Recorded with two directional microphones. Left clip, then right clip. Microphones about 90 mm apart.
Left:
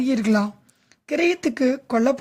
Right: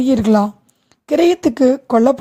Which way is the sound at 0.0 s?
35° right (ahead or behind).